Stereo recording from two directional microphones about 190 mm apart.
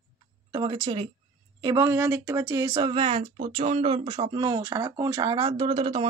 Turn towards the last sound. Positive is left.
turn(degrees=-30)  # may be behind; listen again after turning